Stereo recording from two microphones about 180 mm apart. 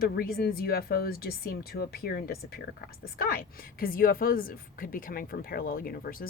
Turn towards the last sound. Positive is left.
turn(degrees=55)  # may be behind; listen again after turning